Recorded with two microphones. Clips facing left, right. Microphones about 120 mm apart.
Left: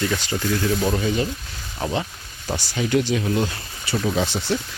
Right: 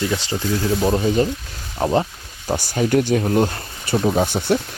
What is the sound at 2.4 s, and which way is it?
Speech, 45° right (ahead or behind).